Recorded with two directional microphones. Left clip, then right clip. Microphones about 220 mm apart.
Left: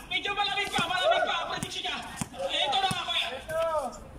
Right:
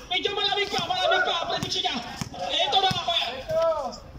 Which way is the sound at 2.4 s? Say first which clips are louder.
Right 4 dB; 25° right (ahead or behind).